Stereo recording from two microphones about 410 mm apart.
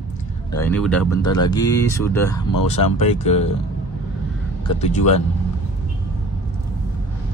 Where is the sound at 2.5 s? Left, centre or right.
Left.